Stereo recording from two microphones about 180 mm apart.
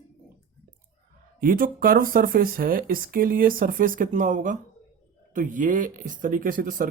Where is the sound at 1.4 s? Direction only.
50° right (ahead or behind).